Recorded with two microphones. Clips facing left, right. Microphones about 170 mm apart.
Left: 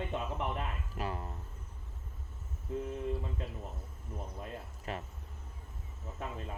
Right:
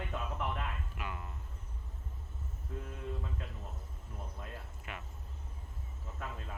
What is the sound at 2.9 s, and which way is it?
Speech, 30° left (ahead or behind).